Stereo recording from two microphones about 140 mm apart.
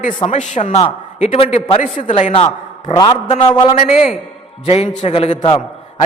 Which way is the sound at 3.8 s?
50° left (ahead or behind).